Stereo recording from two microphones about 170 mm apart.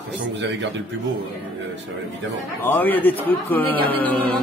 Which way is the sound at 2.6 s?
10° left (ahead or behind).